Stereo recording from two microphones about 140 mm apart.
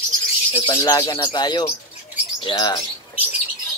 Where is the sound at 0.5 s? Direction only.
35° left (ahead or behind).